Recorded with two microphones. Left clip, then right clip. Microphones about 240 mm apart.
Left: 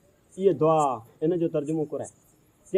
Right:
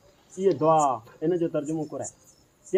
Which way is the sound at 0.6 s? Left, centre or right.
Left.